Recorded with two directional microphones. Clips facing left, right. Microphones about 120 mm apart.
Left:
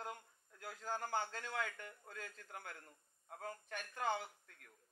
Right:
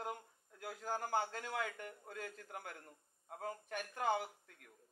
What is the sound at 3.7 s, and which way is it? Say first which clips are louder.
Speech: right 3 dB; 10° right (ahead or behind).